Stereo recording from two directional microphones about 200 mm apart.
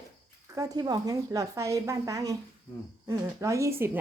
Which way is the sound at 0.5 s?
20° right (ahead or behind).